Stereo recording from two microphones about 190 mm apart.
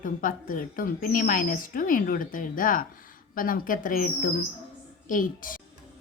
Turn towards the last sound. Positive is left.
turn(degrees=45)  # may be behind; listen again after turning